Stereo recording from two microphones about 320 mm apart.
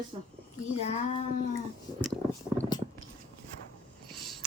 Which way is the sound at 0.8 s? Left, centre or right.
Centre.